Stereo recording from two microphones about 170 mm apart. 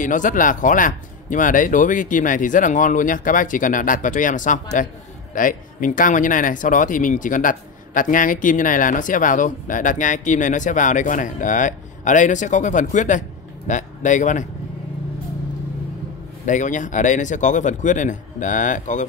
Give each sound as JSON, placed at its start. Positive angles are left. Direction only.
{"t": 0.0, "sound": "speech", "side_deg": 50}
{"t": 16.4, "sound": "speech", "side_deg": 50}